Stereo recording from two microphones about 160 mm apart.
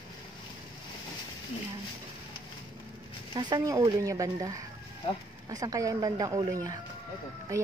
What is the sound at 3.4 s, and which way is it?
A woman's voice, 25° right (ahead or behind).